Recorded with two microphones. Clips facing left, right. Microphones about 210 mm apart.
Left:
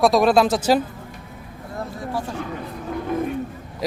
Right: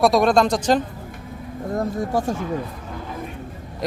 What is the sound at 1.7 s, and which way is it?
Speech, 45° right (ahead or behind).